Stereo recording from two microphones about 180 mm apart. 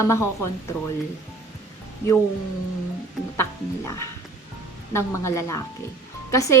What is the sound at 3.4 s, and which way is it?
A woman's voice, 15° left (ahead or behind).